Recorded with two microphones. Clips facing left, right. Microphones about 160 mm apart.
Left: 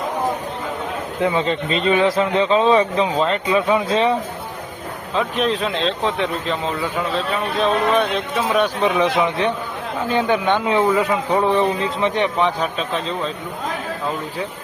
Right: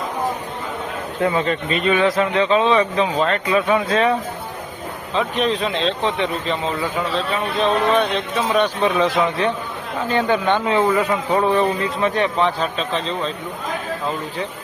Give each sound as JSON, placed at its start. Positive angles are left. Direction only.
{"t": 1.2, "sound": "speech", "side_deg": 20}
{"t": 3.2, "sound": "speech", "side_deg": 20}
{"t": 5.1, "sound": "a man's voice", "side_deg": 0}